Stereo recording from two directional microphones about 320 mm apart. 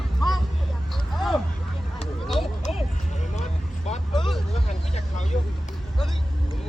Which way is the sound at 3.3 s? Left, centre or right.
Left.